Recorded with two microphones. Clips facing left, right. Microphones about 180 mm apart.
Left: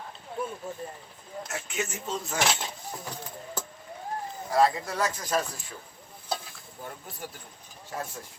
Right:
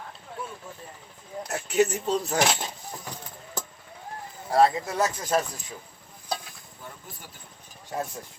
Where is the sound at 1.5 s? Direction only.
40° right (ahead or behind).